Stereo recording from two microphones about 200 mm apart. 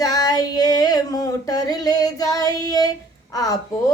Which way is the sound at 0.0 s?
20° left (ahead or behind).